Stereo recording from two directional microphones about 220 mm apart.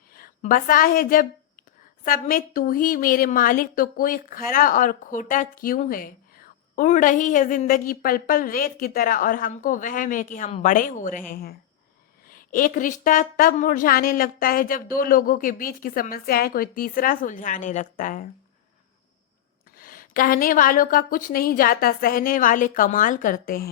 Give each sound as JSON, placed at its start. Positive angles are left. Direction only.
{"t": 0.1, "sound": "a woman's voice", "side_deg": 40}
{"t": 19.7, "sound": "a woman's voice", "side_deg": 40}